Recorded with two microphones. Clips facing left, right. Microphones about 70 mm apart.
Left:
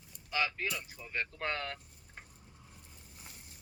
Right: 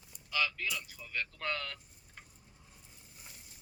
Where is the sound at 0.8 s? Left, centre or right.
Left.